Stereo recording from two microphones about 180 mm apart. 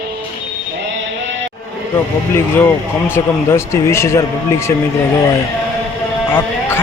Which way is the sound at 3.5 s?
15° left (ahead or behind).